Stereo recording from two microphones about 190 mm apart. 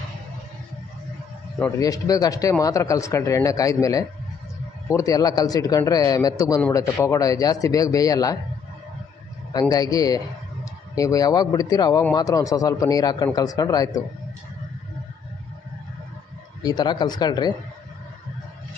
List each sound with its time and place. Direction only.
1.8 s speech: 20° left (ahead or behind)
9.5 s speech: 20° left (ahead or behind)
16.6 s speech: 20° left (ahead or behind)